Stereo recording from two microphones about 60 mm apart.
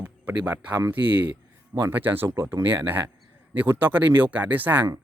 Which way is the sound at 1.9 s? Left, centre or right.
Right.